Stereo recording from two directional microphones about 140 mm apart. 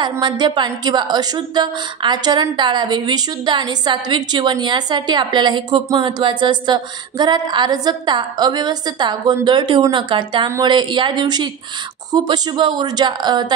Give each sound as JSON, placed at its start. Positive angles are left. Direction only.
{"t": 0.0, "sound": "a woman's voice", "side_deg": -35}